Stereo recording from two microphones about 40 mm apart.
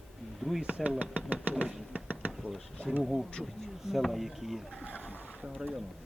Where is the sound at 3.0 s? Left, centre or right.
Centre.